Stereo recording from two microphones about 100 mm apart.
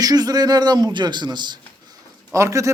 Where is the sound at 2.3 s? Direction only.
30° right (ahead or behind).